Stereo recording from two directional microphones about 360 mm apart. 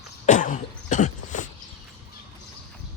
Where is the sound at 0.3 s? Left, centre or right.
Left.